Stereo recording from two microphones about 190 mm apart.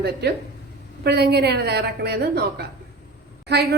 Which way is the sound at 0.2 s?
60° right (ahead or behind).